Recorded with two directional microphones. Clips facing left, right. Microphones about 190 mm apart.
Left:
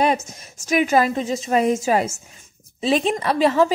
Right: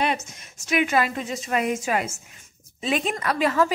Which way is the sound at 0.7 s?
40° left (ahead or behind).